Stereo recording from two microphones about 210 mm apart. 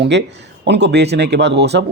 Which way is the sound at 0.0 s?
55° right (ahead or behind).